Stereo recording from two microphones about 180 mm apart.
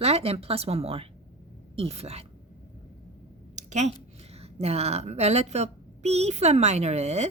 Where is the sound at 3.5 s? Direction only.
40° right (ahead or behind).